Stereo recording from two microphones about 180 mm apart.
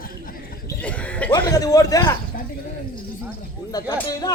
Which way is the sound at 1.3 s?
20° left (ahead or behind).